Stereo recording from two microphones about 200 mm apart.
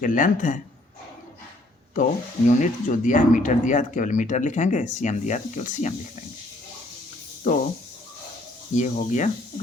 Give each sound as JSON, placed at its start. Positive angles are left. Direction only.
{"t": 0.0, "sound": "speech", "side_deg": 40}
{"t": 2.5, "sound": "speech", "side_deg": 40}
{"t": 7.4, "sound": "speech", "side_deg": 40}
{"t": 8.7, "sound": "speech", "side_deg": 35}